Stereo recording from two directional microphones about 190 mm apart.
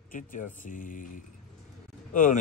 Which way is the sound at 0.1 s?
45° left (ahead or behind).